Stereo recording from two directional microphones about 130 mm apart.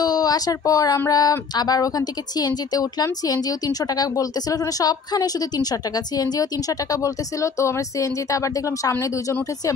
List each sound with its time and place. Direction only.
0.0 s speech: 30° left (ahead or behind)